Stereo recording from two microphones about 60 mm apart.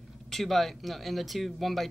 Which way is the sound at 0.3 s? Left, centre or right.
Centre.